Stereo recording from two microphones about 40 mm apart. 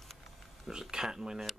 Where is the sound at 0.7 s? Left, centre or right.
Centre.